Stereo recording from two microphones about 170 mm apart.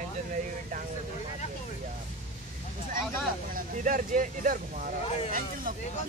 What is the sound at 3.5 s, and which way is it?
Speech, 50° right (ahead or behind).